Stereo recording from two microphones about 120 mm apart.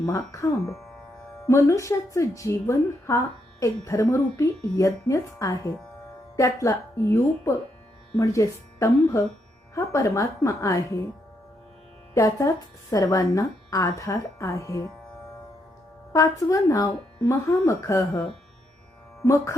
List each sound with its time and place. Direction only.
0.0 s a woman's voice: 25° left (ahead or behind)
12.1 s a woman's voice: 25° left (ahead or behind)
16.1 s a woman's voice: 30° left (ahead or behind)
19.2 s a woman's voice: 25° left (ahead or behind)